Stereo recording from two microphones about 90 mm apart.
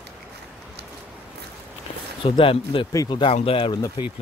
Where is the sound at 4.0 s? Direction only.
55° left (ahead or behind).